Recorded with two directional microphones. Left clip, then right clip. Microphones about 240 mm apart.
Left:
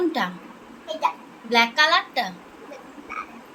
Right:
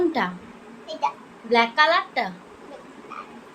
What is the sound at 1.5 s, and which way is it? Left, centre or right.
Speech, right.